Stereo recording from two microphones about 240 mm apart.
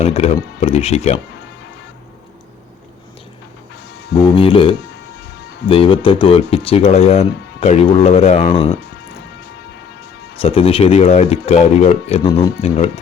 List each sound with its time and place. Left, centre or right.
0.0 s speech: left
4.4 s speech: left
10.4 s speech: left